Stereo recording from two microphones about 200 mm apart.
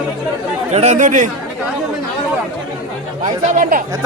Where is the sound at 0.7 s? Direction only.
35° right (ahead or behind).